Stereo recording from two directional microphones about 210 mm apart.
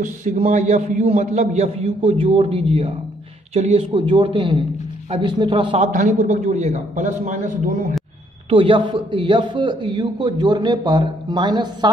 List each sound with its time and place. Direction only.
0.0 s a man's voice: 35° right (ahead or behind)
5.9 s a man's voice: 35° right (ahead or behind)
8.5 s a man's voice: 25° right (ahead or behind)